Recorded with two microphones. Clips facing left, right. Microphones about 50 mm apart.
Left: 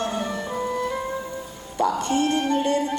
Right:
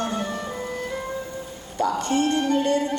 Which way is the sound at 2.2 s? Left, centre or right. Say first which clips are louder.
Right 1 dB; left.